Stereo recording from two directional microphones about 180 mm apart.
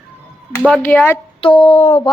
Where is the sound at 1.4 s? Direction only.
30° left (ahead or behind).